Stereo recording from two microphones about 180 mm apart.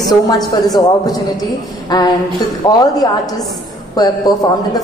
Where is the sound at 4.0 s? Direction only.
20° left (ahead or behind).